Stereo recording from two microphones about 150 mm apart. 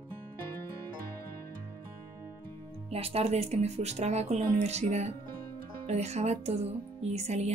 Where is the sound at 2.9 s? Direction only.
40° right (ahead or behind).